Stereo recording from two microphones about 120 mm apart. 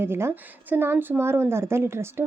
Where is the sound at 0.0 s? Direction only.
20° right (ahead or behind).